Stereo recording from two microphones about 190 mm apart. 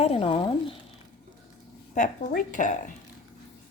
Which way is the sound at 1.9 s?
40° left (ahead or behind).